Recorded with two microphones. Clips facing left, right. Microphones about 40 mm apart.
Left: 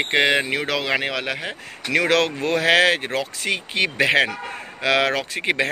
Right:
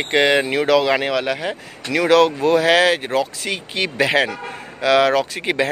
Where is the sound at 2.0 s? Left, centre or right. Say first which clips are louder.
Right 9 dB; left.